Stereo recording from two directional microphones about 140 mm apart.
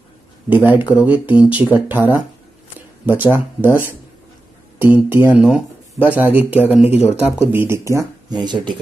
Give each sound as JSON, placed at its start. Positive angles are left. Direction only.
{"t": 0.7, "sound": "speech", "side_deg": -10}